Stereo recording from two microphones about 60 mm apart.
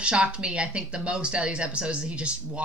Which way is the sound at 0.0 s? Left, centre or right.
Centre.